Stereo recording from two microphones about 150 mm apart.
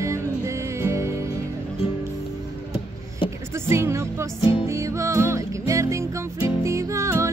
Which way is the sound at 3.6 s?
15° right (ahead or behind).